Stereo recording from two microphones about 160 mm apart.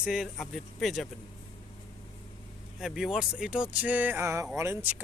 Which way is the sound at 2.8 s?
5° right (ahead or behind).